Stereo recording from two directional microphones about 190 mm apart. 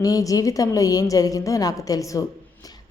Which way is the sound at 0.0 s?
20° left (ahead or behind).